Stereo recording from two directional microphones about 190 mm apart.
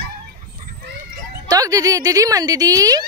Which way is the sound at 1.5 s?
20° right (ahead or behind).